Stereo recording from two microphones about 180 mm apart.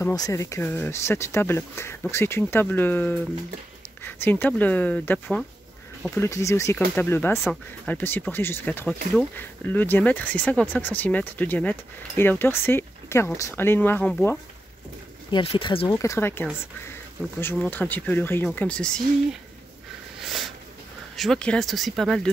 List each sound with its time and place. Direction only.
0.1 s speech: 20° left (ahead or behind)
15.3 s speech: 30° left (ahead or behind)
15.9 s speech: 15° left (ahead or behind)
20.2 s a sound: centre (ahead or behind)
21.2 s speech: 5° left (ahead or behind)